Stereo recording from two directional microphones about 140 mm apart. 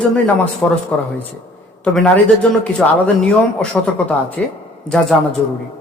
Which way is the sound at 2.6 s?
10° left (ahead or behind).